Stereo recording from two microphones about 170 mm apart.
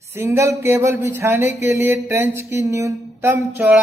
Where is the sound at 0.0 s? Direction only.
15° right (ahead or behind).